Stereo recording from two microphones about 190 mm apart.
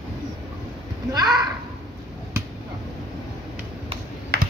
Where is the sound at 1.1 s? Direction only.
20° right (ahead or behind).